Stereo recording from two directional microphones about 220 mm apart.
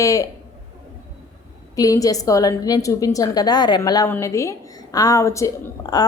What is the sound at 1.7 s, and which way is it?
A woman's voice, 15° left (ahead or behind).